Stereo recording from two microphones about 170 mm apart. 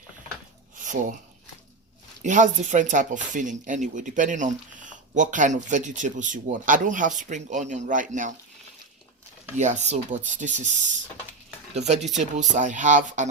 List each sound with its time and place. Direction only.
2.2 s speech: 45° right (ahead or behind)
9.6 s speech: 45° right (ahead or behind)